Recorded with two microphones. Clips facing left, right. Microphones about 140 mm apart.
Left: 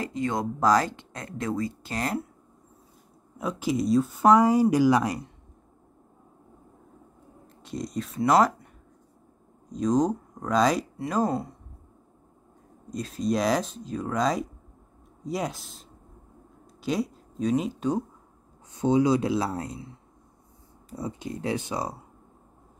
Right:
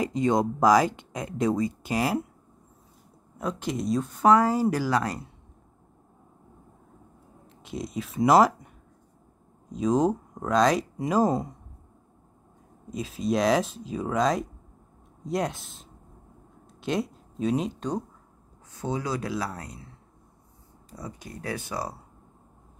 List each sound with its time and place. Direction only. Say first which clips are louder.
0.0 s speech: right 4 dB; 20° right (ahead or behind)
3.3 s speech: left 3 dB; 5° left (ahead or behind)
7.6 s speech: left 1 dB; 5° right (ahead or behind)
9.7 s speech: even; 5° right (ahead or behind)
11.0 s speech: right 3 dB; 10° right (ahead or behind)
12.9 s speech: even; 5° right (ahead or behind)
18.7 s speech: left 9 dB; 20° left (ahead or behind)
20.9 s speech: left 6 dB; 25° left (ahead or behind)